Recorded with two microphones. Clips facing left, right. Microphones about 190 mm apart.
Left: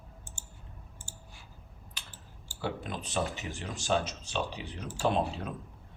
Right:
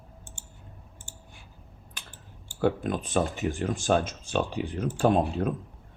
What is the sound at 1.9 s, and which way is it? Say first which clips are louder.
Speech: right 3 dB; 55° right (ahead or behind).